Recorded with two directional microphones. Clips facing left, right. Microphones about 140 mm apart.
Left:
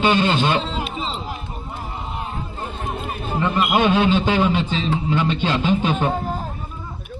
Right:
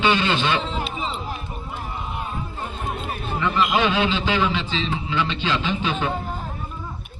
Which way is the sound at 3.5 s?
50° left (ahead or behind).